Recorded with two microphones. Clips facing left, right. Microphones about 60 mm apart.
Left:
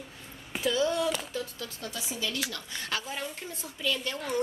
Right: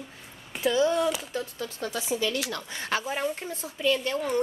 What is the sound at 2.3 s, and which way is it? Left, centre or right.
A woman's voice, right.